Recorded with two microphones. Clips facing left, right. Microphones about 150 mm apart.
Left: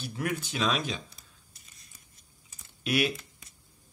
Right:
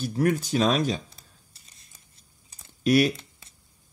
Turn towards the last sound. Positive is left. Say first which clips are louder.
# right 8 dB
turn(degrees=-40)  # may be behind; listen again after turning